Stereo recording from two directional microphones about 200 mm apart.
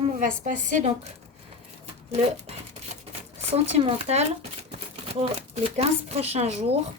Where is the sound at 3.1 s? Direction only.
30° right (ahead or behind).